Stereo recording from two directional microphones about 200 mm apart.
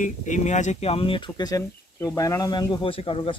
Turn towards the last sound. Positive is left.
turn(degrees=25)  # may be behind; listen again after turning